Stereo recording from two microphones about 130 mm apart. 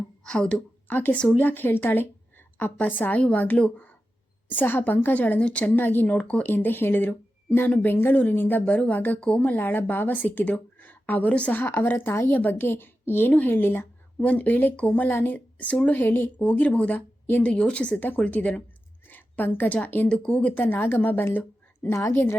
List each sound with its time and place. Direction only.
0.3 s a woman's voice: 5° left (ahead or behind)